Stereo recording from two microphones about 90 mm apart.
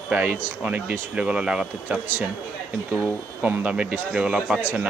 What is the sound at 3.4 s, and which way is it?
Speech, 20° right (ahead or behind).